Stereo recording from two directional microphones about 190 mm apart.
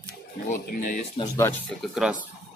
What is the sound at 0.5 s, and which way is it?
Speech, 45° left (ahead or behind).